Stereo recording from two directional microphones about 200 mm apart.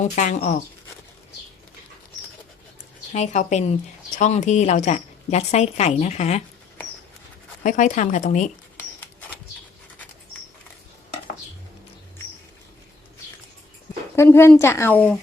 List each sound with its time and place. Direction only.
0.0 s a woman's voice: 35° left (ahead or behind)
3.1 s a woman's voice: 35° left (ahead or behind)
7.6 s a woman's voice: 40° left (ahead or behind)
14.2 s speech: 10° left (ahead or behind)